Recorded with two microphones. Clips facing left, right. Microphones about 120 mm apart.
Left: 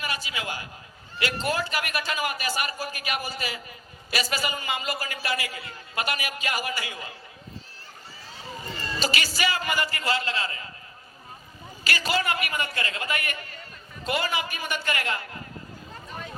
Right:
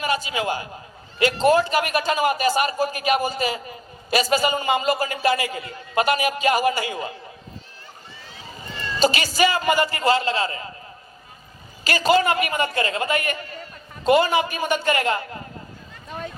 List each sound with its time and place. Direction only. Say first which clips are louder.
0.0 s a man's voice: right 9 dB; 30° right (ahead or behind)
9.0 s a man's voice: right 9 dB; 25° right (ahead or behind)
11.8 s a man's voice: right 9 dB; 25° right (ahead or behind)